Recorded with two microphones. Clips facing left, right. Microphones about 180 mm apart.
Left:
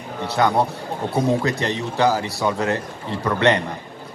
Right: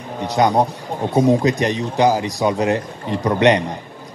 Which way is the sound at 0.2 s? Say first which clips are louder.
Right 3 dB; 15° right (ahead or behind).